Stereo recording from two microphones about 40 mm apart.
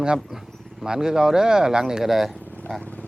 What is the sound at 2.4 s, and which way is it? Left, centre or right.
Vehicle, left.